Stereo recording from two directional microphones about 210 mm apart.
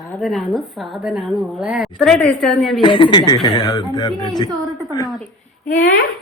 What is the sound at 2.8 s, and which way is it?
A man's voice, 25° left (ahead or behind).